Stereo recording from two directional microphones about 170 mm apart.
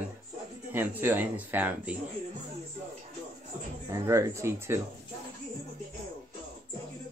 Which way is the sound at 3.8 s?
20° right (ahead or behind).